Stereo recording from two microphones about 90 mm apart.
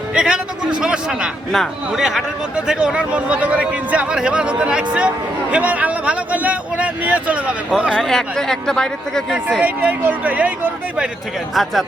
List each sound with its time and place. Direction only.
0.1 s a man's voice: 10° right (ahead or behind)
7.9 s speech: 5° left (ahead or behind)
9.6 s speech: 15° right (ahead or behind)
11.5 s speech: centre (ahead or behind)